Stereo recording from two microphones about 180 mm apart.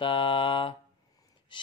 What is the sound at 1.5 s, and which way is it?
Gasp, 25° left (ahead or behind).